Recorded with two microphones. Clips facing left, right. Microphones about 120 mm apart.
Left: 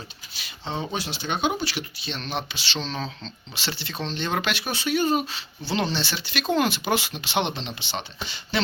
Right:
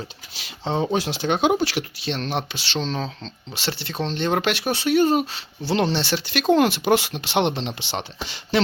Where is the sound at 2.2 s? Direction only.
55° right (ahead or behind).